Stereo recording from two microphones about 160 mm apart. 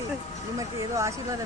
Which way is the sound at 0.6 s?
20° right (ahead or behind).